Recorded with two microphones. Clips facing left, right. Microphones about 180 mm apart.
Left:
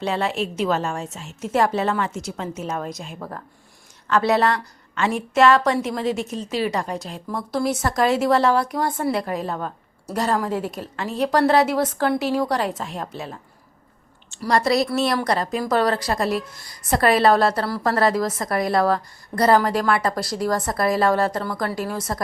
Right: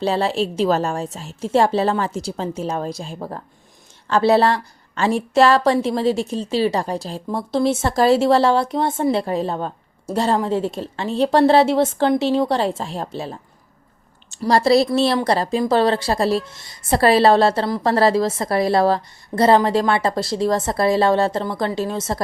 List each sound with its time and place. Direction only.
0.0 s a woman's voice: 30° right (ahead or behind)